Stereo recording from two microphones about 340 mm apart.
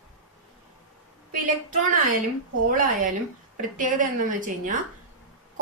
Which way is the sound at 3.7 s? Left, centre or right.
Right.